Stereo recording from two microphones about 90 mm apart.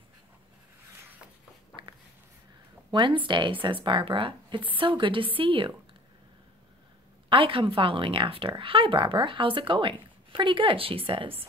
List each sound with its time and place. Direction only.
2.9 s a woman's voice: 65° right (ahead or behind)
7.2 s a woman's voice: 90° right